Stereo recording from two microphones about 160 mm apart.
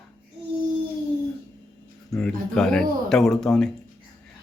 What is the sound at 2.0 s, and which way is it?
A man's voice, 5° left (ahead or behind).